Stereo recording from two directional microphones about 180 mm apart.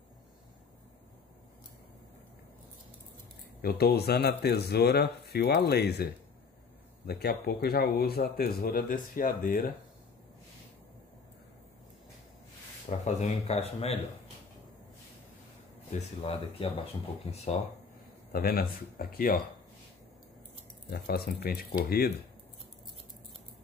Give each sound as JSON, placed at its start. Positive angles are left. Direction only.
{"t": 3.6, "sound": "speech", "side_deg": 60}
{"t": 7.1, "sound": "speech", "side_deg": 60}
{"t": 13.0, "sound": "speech", "side_deg": 35}
{"t": 15.9, "sound": "speech", "side_deg": 35}
{"t": 18.3, "sound": "speech", "side_deg": 55}
{"t": 20.9, "sound": "speech", "side_deg": 60}